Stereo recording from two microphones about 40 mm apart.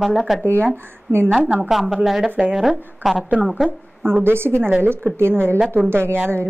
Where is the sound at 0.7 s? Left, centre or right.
Right.